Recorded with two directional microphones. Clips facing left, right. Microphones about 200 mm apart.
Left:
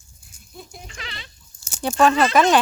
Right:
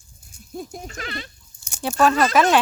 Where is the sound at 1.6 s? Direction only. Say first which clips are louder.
Left 2 dB; 10° right (ahead or behind).